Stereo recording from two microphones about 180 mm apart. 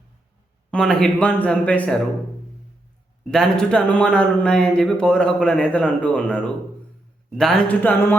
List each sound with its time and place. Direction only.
0.7 s speech: 5° left (ahead or behind)
3.2 s a man's voice: 5° left (ahead or behind)